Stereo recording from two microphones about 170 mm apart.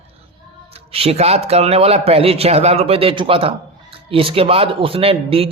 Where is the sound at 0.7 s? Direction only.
35° right (ahead or behind).